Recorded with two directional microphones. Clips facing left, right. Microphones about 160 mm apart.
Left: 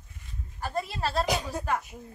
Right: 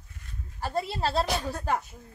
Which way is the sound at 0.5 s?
30° right (ahead or behind).